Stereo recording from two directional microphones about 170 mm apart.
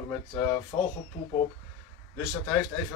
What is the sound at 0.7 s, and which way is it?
Speech, 25° left (ahead or behind).